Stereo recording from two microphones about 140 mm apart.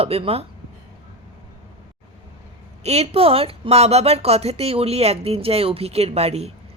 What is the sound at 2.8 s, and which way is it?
Speech, 50° right (ahead or behind).